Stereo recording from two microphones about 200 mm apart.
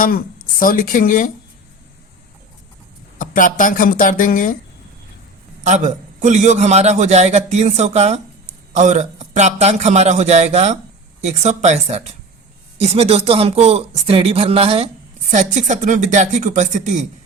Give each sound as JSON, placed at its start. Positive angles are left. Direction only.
{"t": 0.6, "sound": "speech", "side_deg": 45}
{"t": 3.2, "sound": "speech", "side_deg": 40}
{"t": 5.6, "sound": "a man's voice", "side_deg": -35}